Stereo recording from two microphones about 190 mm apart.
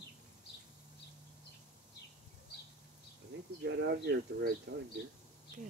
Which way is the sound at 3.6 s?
60° right (ahead or behind).